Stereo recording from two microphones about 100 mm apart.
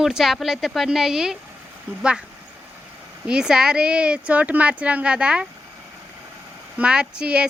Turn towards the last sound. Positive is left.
turn(degrees=-10)  # may be behind; listen again after turning